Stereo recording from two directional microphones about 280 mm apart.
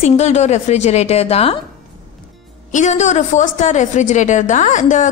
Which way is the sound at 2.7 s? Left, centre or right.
Left.